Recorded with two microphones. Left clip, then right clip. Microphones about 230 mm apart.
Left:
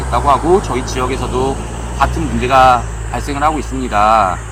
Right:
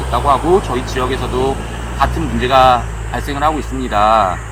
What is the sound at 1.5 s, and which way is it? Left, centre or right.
Speech, centre.